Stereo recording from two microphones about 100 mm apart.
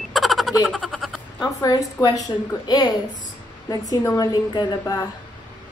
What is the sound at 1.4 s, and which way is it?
A woman's voice, 40° left (ahead or behind).